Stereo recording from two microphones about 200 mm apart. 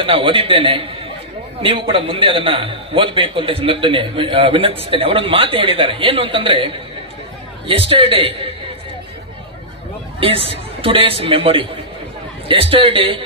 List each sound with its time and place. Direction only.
0.0 s a man's voice: 25° right (ahead or behind)
10.2 s a man's voice: 25° right (ahead or behind)